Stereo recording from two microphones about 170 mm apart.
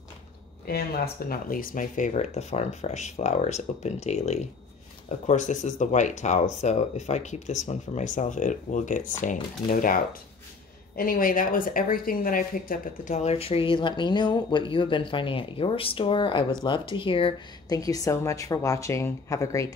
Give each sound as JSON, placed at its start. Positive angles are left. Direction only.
{"t": 0.7, "sound": "speech", "side_deg": 65}
{"t": 11.0, "sound": "a woman's voice", "side_deg": 55}